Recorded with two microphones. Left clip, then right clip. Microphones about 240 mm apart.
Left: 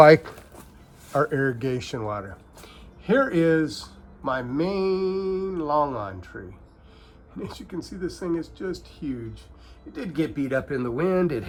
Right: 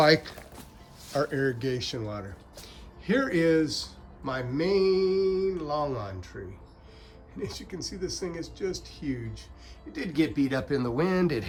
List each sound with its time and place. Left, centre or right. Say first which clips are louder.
0.0 s speech: left 8 dB; left
2.6 s speech: left 6 dB; centre
7.4 s speech: left 1 dB; centre